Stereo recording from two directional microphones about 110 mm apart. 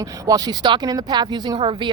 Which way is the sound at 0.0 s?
35° right (ahead or behind).